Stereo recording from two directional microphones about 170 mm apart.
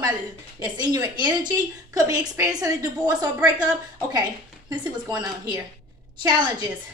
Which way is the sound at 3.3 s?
10° right (ahead or behind).